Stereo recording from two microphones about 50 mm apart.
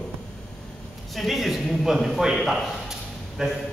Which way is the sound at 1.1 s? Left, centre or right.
Centre.